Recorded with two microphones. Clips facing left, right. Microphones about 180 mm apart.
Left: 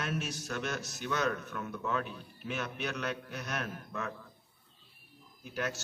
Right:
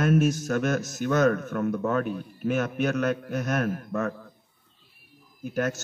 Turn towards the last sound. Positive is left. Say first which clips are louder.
# right 9 dB
turn(degrees=-45)  # may be behind; listen again after turning